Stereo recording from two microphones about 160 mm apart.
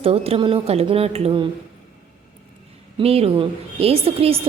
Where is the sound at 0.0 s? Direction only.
35° right (ahead or behind).